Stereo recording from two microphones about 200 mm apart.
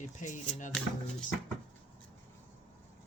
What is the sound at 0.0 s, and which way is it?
Speech, 40° left (ahead or behind).